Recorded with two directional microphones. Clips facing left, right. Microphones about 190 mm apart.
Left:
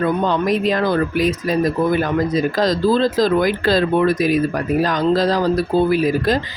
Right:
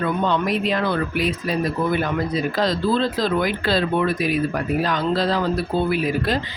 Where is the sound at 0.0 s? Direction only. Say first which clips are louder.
Left 3 dB; 40° left (ahead or behind).